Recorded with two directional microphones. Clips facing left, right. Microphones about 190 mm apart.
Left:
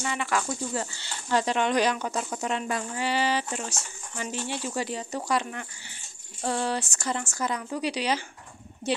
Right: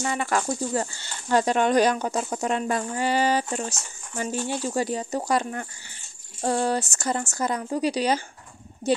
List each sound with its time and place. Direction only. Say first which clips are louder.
0.0 s speech: right 3 dB; 45° right (ahead or behind)